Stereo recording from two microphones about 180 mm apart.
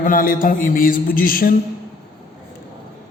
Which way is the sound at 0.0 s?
50° left (ahead or behind).